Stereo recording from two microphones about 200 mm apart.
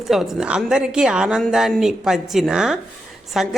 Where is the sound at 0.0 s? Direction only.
Centre (ahead or behind).